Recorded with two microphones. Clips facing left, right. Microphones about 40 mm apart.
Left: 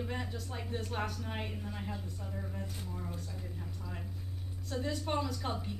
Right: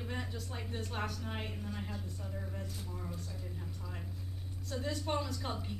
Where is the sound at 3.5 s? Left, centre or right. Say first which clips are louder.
Left 1 dB; centre.